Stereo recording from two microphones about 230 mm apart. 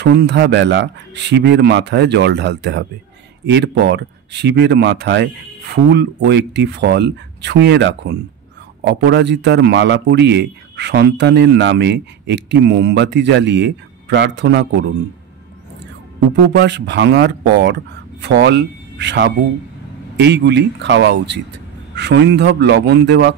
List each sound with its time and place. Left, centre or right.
0.0 s a man's voice: right
16.5 s a man's voice: right